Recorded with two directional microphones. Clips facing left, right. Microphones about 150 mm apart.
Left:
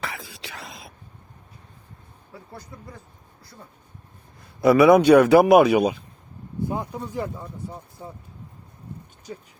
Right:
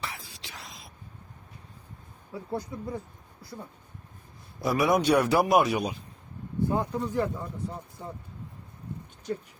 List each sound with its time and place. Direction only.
0.1 s whispering: 65° left (ahead or behind)
4.6 s speech: 65° left (ahead or behind)
6.7 s speech: 15° left (ahead or behind)